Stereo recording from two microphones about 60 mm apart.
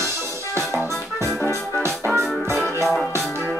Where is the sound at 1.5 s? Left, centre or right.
Right.